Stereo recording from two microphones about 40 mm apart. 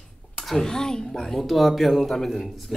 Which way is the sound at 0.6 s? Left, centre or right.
Centre.